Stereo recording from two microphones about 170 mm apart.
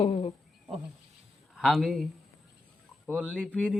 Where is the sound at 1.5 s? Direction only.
Centre (ahead or behind).